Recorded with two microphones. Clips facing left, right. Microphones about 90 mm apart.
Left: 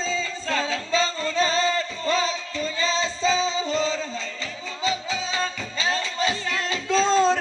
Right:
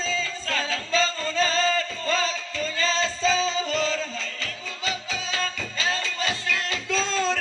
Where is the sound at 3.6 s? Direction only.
25° left (ahead or behind).